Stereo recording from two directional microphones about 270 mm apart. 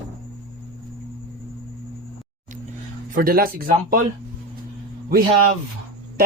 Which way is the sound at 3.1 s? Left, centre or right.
Right.